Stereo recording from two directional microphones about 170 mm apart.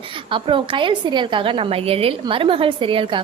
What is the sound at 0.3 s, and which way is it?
A woman's voice, 30° right (ahead or behind).